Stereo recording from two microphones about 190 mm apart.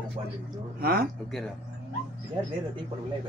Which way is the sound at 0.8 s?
50° right (ahead or behind).